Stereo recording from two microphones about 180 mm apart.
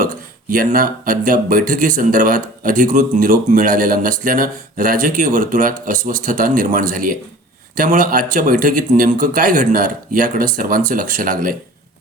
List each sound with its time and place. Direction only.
0.0 s speech: 50° right (ahead or behind)